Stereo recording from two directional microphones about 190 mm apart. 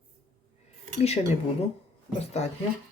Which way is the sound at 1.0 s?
35° left (ahead or behind).